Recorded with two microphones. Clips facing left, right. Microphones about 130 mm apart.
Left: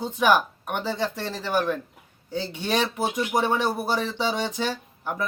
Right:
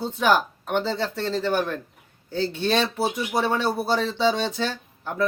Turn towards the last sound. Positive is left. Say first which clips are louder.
# right 4 dB
turn(degrees=15)  # may be behind; listen again after turning